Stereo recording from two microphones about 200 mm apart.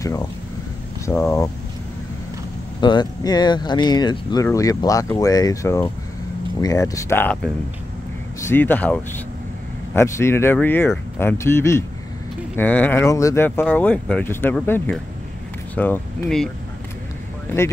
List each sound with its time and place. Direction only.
0.0 s speech: 15° left (ahead or behind)
2.8 s speech: 20° left (ahead or behind); by 16.4 s 5° left (ahead or behind)